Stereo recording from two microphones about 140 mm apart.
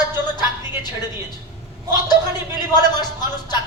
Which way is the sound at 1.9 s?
30° left (ahead or behind).